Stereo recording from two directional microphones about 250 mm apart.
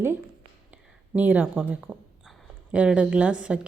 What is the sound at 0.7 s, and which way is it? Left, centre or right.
Speech, centre.